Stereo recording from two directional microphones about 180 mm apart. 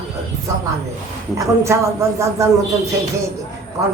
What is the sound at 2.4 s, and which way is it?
Speech, 15° right (ahead or behind).